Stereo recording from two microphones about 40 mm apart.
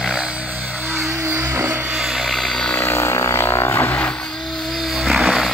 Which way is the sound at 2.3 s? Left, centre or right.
Centre.